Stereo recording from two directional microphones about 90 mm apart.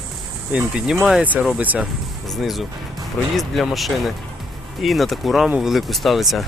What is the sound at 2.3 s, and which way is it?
Speech, centre (ahead or behind).